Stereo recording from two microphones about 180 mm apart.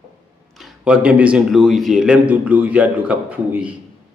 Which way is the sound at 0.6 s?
5° right (ahead or behind).